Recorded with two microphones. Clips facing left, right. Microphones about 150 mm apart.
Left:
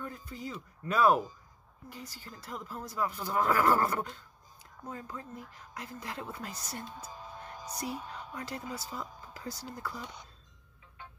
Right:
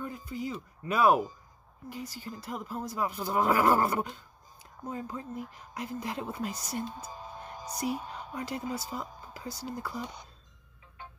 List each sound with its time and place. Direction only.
0.0 s speech: 15° right (ahead or behind)